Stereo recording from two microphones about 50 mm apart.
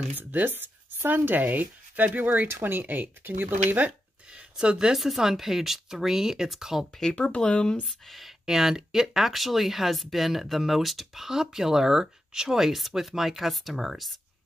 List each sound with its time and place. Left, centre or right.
0.2 s speech: right
4.3 s speech: centre
4.9 s speech: centre
7.2 s speech: centre
7.8 s speech: centre